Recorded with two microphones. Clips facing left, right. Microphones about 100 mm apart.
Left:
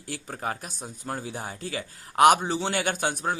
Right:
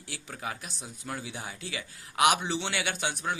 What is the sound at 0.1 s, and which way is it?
A man's voice, 45° left (ahead or behind).